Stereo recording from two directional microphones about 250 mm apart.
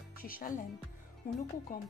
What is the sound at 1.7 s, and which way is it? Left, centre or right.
Speech, left.